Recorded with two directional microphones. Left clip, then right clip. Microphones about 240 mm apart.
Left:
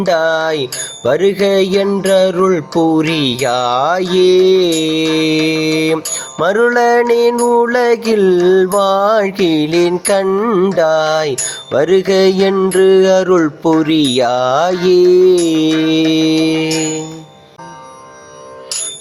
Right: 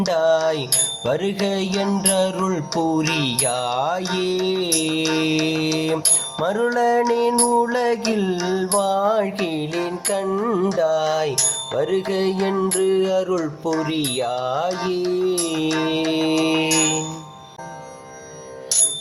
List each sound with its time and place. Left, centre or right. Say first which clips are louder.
0.0 s mantra: left 5 dB; left